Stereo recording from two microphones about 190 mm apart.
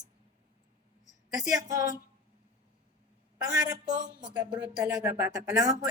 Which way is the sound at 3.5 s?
20° right (ahead or behind).